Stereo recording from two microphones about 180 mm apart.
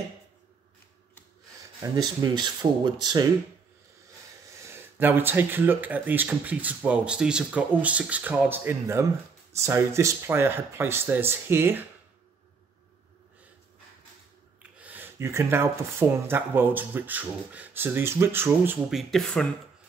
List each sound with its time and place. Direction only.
1.8 s speech: 20° right (ahead or behind)
4.6 s speech: 15° right (ahead or behind)
14.8 s speech: 10° right (ahead or behind)